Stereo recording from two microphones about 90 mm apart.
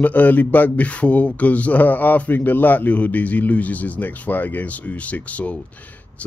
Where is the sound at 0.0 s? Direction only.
20° left (ahead or behind).